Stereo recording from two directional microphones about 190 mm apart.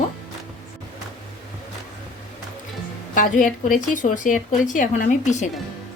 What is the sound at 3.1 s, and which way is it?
A woman's voice, 45° left (ahead or behind).